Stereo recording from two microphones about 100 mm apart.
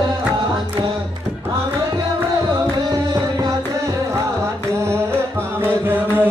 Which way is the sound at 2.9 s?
35° right (ahead or behind).